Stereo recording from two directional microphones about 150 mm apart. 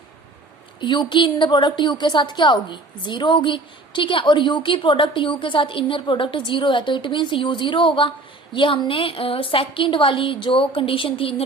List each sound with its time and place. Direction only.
0.8 s a woman's voice: 30° left (ahead or behind)